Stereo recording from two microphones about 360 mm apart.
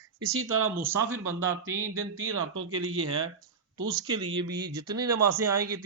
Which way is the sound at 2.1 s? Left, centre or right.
Right.